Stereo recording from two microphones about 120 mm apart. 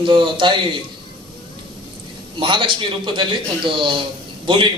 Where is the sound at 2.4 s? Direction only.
45° right (ahead or behind).